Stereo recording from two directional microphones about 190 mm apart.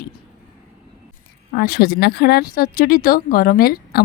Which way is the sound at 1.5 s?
50° left (ahead or behind).